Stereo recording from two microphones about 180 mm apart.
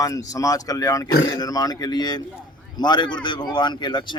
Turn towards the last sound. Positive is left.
turn(degrees=25)  # may be behind; listen again after turning